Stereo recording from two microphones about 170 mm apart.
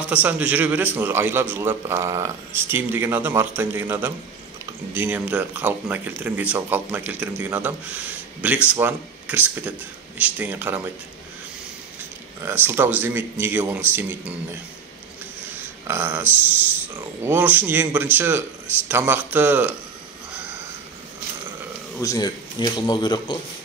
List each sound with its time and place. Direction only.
0.0 s speech: 10° right (ahead or behind)
12.4 s speech: 15° right (ahead or behind)
15.9 s speech: 10° right (ahead or behind)
22.0 s speech: 20° left (ahead or behind)